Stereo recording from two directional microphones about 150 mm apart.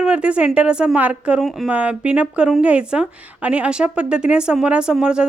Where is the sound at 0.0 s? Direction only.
5° right (ahead or behind).